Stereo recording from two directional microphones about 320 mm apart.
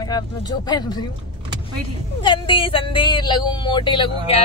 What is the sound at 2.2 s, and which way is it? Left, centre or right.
Speech, centre.